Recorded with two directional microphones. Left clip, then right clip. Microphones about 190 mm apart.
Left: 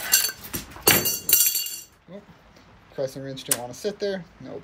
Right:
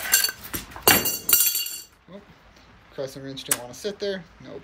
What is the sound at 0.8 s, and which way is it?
Chink, 15° right (ahead or behind).